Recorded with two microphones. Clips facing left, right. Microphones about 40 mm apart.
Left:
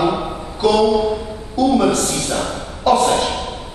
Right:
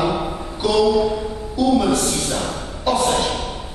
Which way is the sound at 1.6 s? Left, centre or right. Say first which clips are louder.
Left 2 dB; centre.